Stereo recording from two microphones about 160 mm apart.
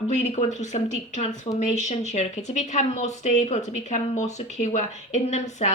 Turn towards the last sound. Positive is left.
turn(degrees=45)  # may be behind; listen again after turning